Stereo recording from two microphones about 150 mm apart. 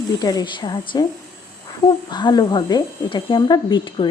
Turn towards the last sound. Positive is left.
turn(degrees=35)  # may be behind; listen again after turning